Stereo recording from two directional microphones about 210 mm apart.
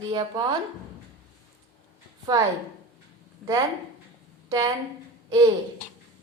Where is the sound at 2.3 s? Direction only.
15° right (ahead or behind).